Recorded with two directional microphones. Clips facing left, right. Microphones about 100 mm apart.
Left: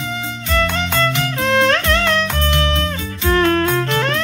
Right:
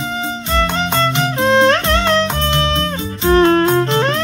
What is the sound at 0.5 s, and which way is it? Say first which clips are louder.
Music: right 1 dB; 25° right (ahead or behind).